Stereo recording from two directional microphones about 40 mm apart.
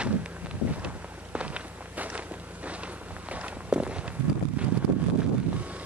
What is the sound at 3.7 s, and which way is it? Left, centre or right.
Walk, right.